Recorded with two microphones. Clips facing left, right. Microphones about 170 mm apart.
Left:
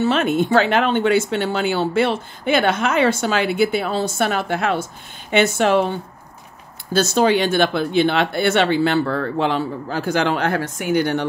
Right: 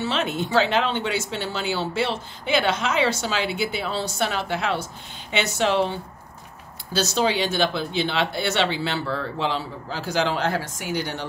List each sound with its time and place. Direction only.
0.0 s speech: 55° left (ahead or behind)